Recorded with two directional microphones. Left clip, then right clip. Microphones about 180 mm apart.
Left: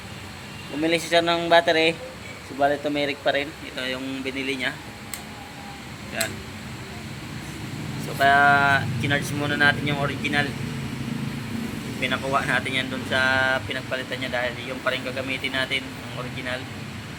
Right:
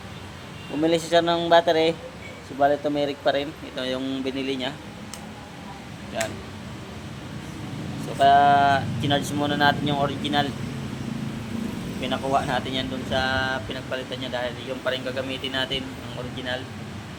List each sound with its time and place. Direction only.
0.8 s speech: 15° right (ahead or behind)
8.2 s speech: 5° right (ahead or behind)
12.0 s speech: 10° right (ahead or behind)
14.8 s speech: 15° right (ahead or behind)